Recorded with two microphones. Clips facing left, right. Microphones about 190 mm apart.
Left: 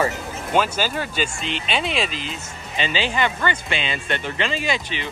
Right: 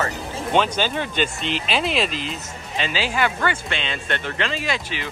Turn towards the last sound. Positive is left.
turn(degrees=0)  # may be behind; listen again after turning